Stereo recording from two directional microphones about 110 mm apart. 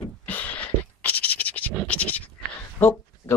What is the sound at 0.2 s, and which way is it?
Scratch, 15° left (ahead or behind).